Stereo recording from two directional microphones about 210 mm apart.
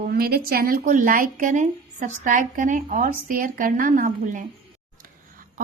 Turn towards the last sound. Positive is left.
turn(degrees=-40)  # may be behind; listen again after turning